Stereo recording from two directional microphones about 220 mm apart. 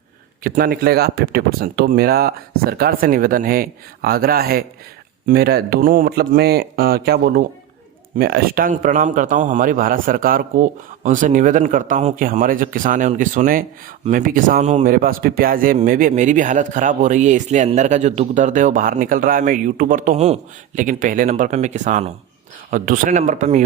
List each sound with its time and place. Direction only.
0.4 s a man's voice: 40° right (ahead or behind)